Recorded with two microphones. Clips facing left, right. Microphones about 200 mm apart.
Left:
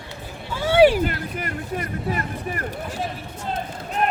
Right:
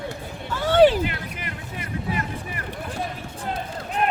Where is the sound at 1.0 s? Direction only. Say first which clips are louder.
Left 4 dB; 45° left (ahead or behind).